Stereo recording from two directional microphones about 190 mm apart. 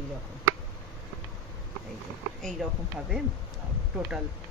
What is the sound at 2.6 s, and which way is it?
Speech, centre (ahead or behind).